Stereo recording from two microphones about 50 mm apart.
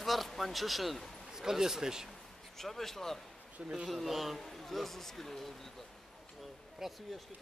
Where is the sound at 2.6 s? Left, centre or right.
Centre.